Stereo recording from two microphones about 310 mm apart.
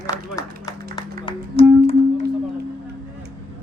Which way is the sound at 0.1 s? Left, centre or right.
Right.